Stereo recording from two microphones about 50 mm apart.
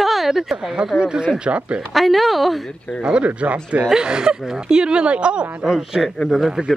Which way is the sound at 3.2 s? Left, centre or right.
Right.